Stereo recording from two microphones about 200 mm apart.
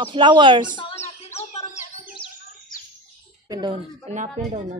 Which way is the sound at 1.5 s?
35° left (ahead or behind).